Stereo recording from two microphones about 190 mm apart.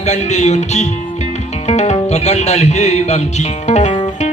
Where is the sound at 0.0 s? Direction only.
35° left (ahead or behind).